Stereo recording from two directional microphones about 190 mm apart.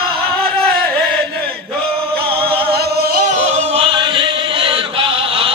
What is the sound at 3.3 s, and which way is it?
Chant, 35° right (ahead or behind).